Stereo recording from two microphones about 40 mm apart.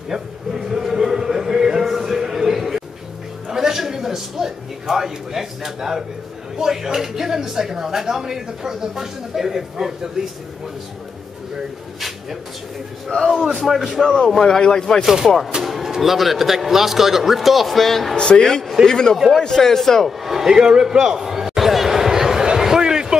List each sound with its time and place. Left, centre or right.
0.1 s a sound: centre
1.9 s music: centre
3.4 s a man's voice: centre
13.7 s speech: centre
14.4 s speech: centre
15.6 s speech: centre
19.1 s speech: centre
19.4 s speech: centre
20.1 s speech: centre
20.5 s a sound: centre